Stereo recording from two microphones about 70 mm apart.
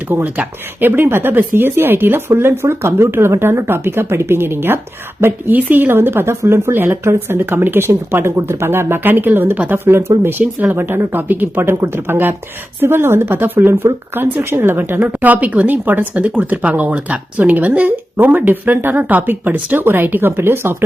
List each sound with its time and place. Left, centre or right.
0.1 s speech: right
5.5 s speech: right